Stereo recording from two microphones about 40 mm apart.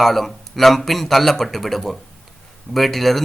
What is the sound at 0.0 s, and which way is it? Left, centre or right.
Speech, centre.